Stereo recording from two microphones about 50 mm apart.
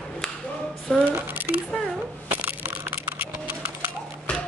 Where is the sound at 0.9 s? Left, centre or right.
Centre.